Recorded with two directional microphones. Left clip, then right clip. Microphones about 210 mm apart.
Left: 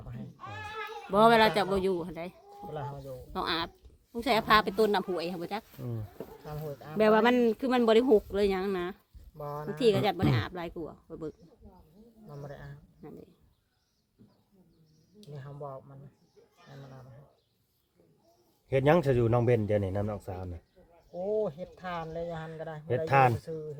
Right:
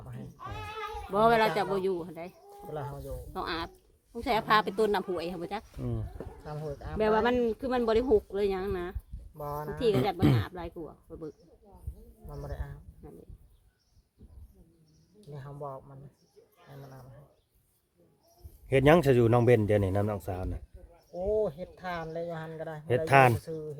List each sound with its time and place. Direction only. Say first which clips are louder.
0.0 s music: right 1 dB; 10° right (ahead or behind)
1.1 s speech: left 2 dB; 30° left (ahead or behind)
2.6 s speech: right 1 dB; 10° right (ahead or behind)
3.3 s speech: left 3 dB; 30° left (ahead or behind)
6.4 s speech: right 2 dB; 10° right (ahead or behind)
7.0 s speech: left 3 dB; 35° left (ahead or behind)
9.4 s speech: right 1 dB; 10° right (ahead or behind)
9.7 s speech: left 2 dB; 35° left (ahead or behind)
12.3 s speech: right 2 dB; 15° right (ahead or behind)
15.3 s speech: right 2 dB; 10° right (ahead or behind)
18.7 s speech: right 3 dB; 40° right (ahead or behind)
21.1 s speech: right 2 dB; 15° right (ahead or behind)
23.0 s speech: right 2 dB; 40° right (ahead or behind)